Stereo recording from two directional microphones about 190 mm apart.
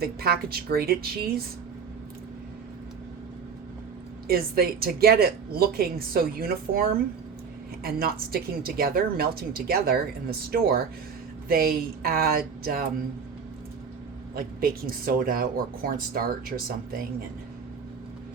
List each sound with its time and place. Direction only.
0.0 s a woman's voice: 55° right (ahead or behind)
4.3 s a woman's voice: 55° right (ahead or behind)
14.3 s a woman's voice: 50° right (ahead or behind)